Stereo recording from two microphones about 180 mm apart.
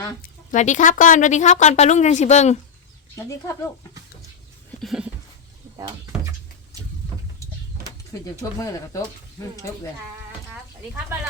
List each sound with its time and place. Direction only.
0.2 s a woman's voice: 40° left (ahead or behind)
3.2 s speech: 15° left (ahead or behind)
4.8 s dog: centre (ahead or behind)
8.2 s speech: 20° left (ahead or behind)